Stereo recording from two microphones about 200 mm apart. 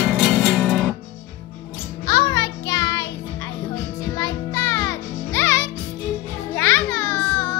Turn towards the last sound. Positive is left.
turn(degrees=10)  # may be behind; listen again after turning